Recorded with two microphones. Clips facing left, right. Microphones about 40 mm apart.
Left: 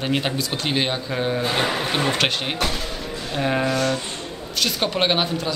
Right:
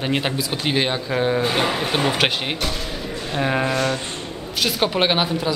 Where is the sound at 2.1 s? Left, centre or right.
Centre.